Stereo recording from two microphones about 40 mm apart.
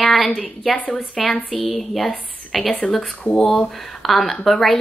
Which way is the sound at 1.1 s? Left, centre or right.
Centre.